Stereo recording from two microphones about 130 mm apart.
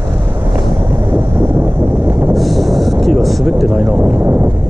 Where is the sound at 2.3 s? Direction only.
Centre (ahead or behind).